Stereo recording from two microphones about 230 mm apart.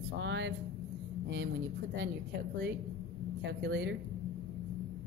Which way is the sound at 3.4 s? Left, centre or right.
Right.